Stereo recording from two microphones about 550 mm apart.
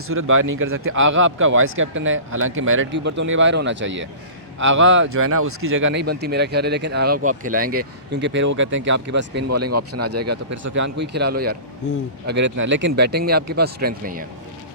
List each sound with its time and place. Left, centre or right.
0.1 s speech: right